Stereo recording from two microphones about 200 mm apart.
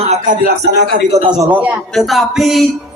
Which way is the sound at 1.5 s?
5° right (ahead or behind).